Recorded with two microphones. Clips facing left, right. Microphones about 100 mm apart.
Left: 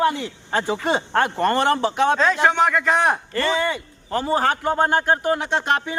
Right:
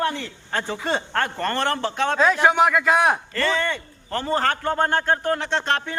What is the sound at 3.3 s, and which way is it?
Speech, 10° left (ahead or behind).